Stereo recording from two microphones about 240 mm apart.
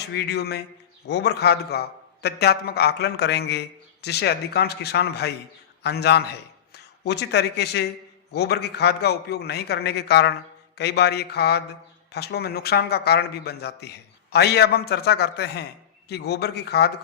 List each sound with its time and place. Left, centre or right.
0.1 s a man's voice: left